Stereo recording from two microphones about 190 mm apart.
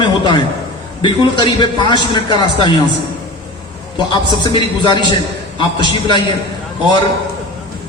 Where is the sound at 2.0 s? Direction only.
25° left (ahead or behind).